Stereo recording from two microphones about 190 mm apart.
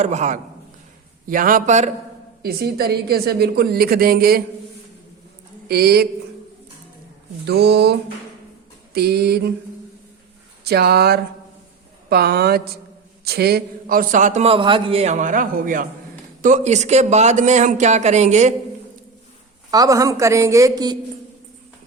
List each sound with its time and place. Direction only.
0.0 s a man's voice: 40° right (ahead or behind)
2.4 s a man's voice: 55° right (ahead or behind)
5.6 s a woman's voice: 55° right (ahead or behind)
7.4 s a woman's voice: 60° right (ahead or behind)
10.6 s a woman's voice: 55° right (ahead or behind); by 18.5 s 40° right (ahead or behind)
19.7 s a woman's voice: 20° right (ahead or behind)